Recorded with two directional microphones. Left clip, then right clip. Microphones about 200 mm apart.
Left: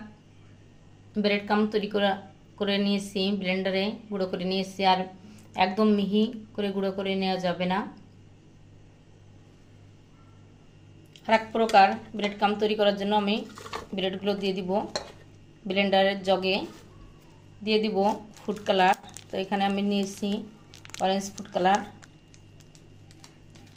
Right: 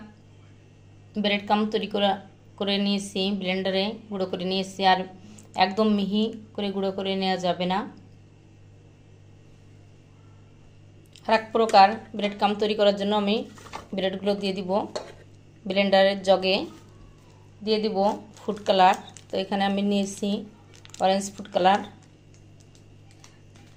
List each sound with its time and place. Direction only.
1.1 s speech: 15° right (ahead or behind)
11.1 s speech: 20° right (ahead or behind)